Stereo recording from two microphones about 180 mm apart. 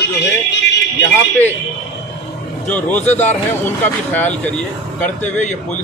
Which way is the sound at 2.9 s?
10° left (ahead or behind).